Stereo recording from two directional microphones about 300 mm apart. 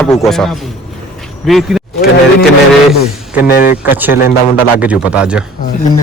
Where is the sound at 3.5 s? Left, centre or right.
Left.